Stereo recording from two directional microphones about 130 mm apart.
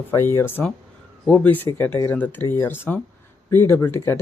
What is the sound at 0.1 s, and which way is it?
Speech, 20° left (ahead or behind).